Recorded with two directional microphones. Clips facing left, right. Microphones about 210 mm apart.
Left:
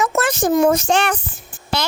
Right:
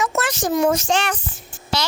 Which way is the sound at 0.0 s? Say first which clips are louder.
Left 4 dB; 55° left (ahead or behind).